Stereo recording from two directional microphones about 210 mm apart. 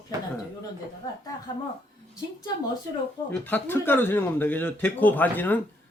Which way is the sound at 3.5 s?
10° left (ahead or behind).